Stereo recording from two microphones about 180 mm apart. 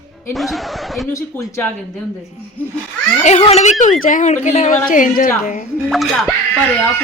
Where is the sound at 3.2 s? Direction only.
35° left (ahead or behind).